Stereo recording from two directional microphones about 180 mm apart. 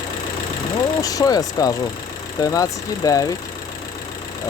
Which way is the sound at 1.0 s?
20° left (ahead or behind).